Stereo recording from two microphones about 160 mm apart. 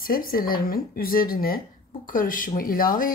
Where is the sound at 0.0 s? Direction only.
65° left (ahead or behind).